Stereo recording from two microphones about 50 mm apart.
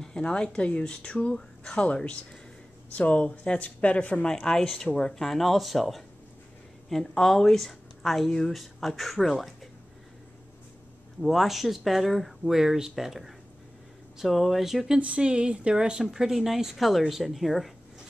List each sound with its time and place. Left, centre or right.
0.0 s speech: centre
11.1 s speech: centre
15.0 s speech: right; by 17.7 s centre